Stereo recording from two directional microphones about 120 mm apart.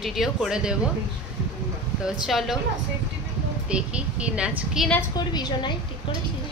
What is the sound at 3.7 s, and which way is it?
A woman's voice, 10° right (ahead or behind).